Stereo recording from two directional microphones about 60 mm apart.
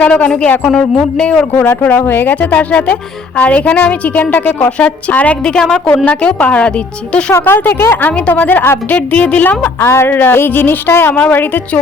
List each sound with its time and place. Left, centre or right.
0.1 s a woman's voice: centre
1.8 s a woman's voice: left
2.4 s a woman's voice: left
5.5 s a woman's voice: centre
5.9 s a woman's voice: left
7.3 s a woman's voice: left
9.8 s a woman's voice: left
11.2 s a woman's voice: left